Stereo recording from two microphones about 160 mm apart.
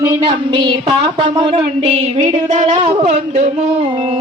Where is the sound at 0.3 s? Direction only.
30° right (ahead or behind).